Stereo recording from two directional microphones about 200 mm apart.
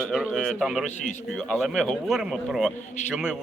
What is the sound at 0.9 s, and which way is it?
Speech, 35° left (ahead or behind).